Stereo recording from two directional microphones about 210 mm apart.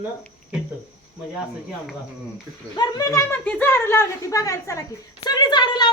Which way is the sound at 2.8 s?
15° left (ahead or behind).